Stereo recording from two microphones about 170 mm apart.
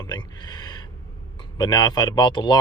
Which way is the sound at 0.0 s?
25° left (ahead or behind).